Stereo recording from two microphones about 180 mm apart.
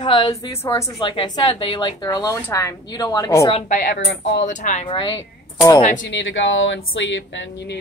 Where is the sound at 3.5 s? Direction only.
45° left (ahead or behind); by 4.5 s 75° left (ahead or behind).